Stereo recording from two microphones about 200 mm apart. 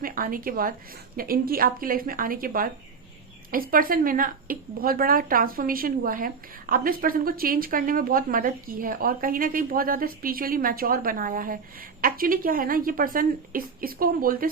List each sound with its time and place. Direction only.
0.0 s a woman's voice: 45° right (ahead or behind)